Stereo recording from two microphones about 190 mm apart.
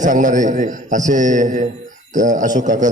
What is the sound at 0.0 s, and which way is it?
A man's voice, 40° right (ahead or behind).